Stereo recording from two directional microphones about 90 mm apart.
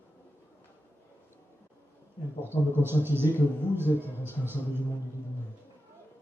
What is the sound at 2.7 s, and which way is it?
Speech, 25° right (ahead or behind).